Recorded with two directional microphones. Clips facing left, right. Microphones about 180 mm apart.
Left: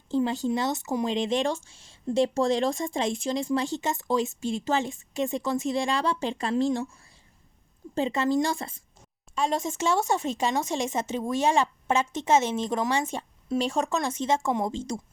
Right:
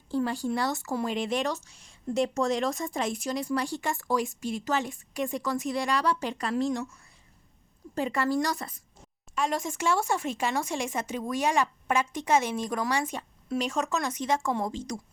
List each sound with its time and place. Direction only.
0.1 s speech: 20° left (ahead or behind)